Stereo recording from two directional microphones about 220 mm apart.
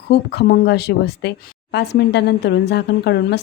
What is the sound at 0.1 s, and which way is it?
A woman's voice, 50° left (ahead or behind).